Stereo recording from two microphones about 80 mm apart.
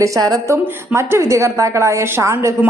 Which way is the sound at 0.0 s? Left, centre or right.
Right.